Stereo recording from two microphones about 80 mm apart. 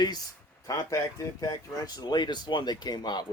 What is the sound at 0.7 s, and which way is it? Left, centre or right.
Speech, left.